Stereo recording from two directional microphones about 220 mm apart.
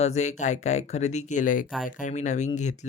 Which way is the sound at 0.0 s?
30° left (ahead or behind).